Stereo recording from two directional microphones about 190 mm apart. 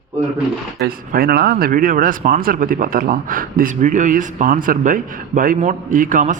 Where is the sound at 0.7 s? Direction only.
50° right (ahead or behind).